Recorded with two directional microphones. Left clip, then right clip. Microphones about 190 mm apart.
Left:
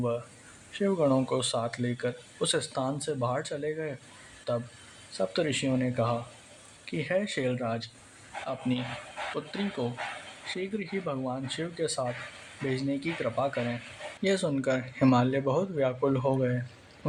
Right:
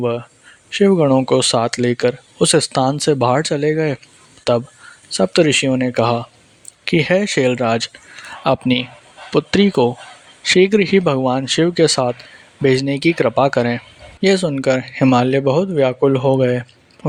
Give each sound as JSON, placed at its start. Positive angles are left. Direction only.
{"t": 0.7, "sound": "speech", "side_deg": -45}
{"t": 14.2, "sound": "speech", "side_deg": -40}